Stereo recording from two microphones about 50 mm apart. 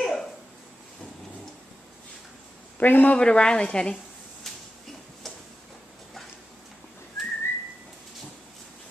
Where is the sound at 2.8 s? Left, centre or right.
Left.